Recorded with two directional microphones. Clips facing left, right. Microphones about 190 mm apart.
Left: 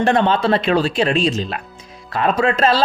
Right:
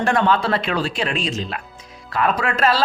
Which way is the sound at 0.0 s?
25° left (ahead or behind).